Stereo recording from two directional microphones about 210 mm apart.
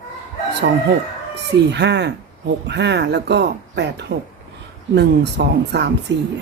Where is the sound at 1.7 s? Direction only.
55° right (ahead or behind).